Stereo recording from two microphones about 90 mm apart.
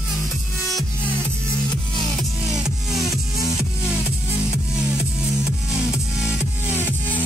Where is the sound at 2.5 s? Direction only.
5° right (ahead or behind).